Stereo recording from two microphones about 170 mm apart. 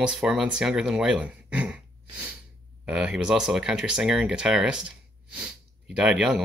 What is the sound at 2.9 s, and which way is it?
Speech, 5° right (ahead or behind).